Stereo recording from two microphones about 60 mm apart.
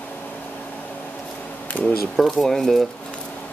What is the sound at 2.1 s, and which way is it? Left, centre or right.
Speech, centre.